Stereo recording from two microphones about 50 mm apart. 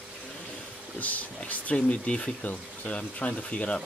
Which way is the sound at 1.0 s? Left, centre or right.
Left.